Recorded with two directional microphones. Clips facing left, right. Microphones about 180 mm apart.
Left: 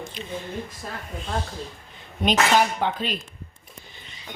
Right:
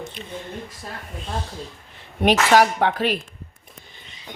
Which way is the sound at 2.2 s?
70° right (ahead or behind).